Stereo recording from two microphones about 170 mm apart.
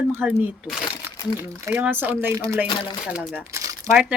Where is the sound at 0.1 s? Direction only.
10° right (ahead or behind).